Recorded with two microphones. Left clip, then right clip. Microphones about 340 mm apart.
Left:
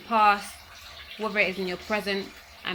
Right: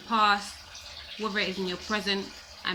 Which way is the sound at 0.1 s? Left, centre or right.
Centre.